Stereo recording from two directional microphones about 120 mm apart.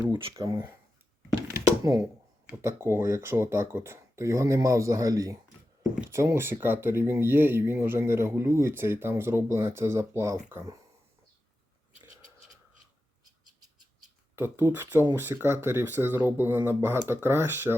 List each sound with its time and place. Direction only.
0.1 s speech: 50° right (ahead or behind)
0.3 s speech: 30° right (ahead or behind)
1.5 s a sound: 25° right (ahead or behind)
2.6 s speech: 20° right (ahead or behind)
14.3 s speech: 20° right (ahead or behind)